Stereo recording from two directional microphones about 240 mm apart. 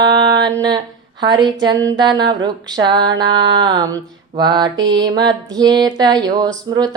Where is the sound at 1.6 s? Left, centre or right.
Centre.